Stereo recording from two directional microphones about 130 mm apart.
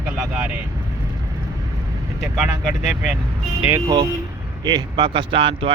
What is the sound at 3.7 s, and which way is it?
Speech, 35° right (ahead or behind).